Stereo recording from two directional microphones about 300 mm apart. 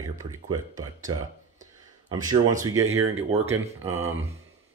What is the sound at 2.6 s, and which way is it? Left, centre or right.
Speech, centre.